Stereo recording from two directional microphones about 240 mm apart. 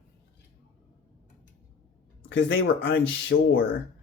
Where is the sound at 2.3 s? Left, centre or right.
Left.